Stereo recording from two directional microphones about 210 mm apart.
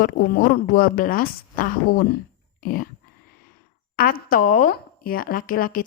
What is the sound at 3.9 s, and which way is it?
A woman's voice, 45° left (ahead or behind).